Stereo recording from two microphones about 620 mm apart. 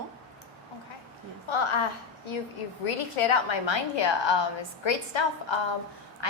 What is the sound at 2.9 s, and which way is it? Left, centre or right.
A woman's voice, left.